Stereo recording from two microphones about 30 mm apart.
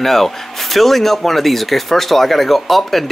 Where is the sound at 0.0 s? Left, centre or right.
Centre.